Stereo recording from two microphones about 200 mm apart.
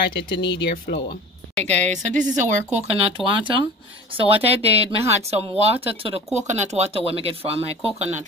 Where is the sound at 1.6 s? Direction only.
35° right (ahead or behind).